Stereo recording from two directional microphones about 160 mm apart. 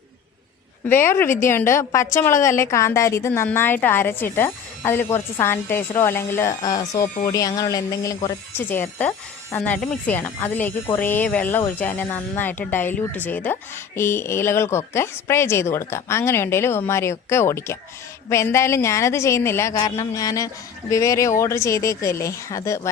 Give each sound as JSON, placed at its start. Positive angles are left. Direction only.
{"t": 0.9, "sound": "speech", "side_deg": 15}